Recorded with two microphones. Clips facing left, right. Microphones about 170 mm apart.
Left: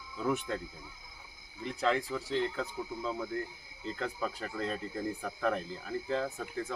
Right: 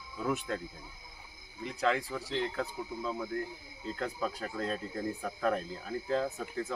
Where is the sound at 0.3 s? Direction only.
10° right (ahead or behind).